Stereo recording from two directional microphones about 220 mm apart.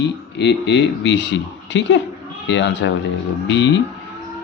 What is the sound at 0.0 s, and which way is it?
Speech, 50° left (ahead or behind).